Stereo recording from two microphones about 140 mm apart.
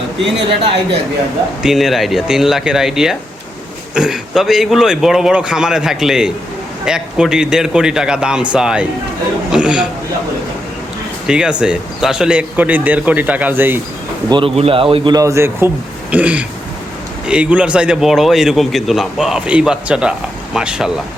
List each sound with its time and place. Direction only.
1.6 s a man's voice: centre (ahead or behind)
11.3 s a man's voice: 5° right (ahead or behind)
14.3 s speech: 35° right (ahead or behind)
15.1 s a man's voice: 25° right (ahead or behind); by 20.9 s 5° right (ahead or behind)